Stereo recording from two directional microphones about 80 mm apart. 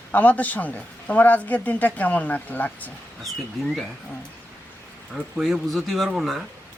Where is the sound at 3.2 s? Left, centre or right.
Centre.